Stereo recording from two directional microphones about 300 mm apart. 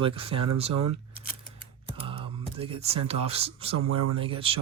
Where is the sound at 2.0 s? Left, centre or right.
Centre.